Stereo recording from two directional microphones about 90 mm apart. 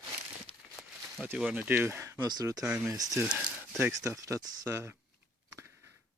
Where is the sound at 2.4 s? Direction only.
40° right (ahead or behind).